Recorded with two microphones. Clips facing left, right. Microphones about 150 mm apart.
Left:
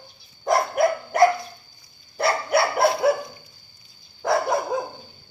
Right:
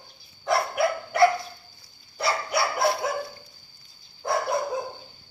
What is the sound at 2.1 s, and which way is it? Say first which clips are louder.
Dog: left 5 dB; 60° left (ahead or behind).